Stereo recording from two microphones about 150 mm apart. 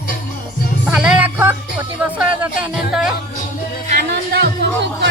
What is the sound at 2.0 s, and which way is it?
Speech, 10° right (ahead or behind).